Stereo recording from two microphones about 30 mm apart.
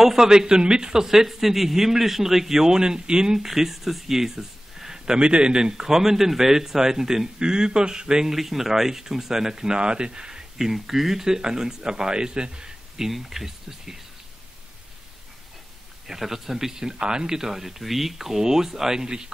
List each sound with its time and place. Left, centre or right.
0.0 s speech: centre
3.3 s speech: centre
8.3 s speech: centre
9.8 s speech: right
10.6 s speech: centre
11.2 s speech: centre
13.1 s speech: centre
16.1 s speech: centre
17.5 s speech: centre; by 19.3 s right